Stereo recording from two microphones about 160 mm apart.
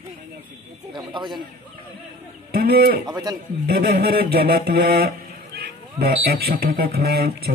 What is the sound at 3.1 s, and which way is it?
Speech, 25° right (ahead or behind).